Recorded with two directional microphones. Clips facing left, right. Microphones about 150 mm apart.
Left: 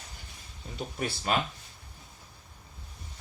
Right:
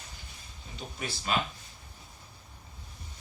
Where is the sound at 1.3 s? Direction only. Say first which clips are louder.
Left 2 dB; 45° left (ahead or behind).